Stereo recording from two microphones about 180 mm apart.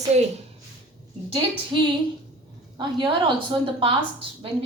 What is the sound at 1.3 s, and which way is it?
A woman's voice, 25° right (ahead or behind).